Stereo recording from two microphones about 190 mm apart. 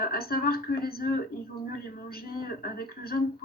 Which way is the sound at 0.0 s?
50° left (ahead or behind).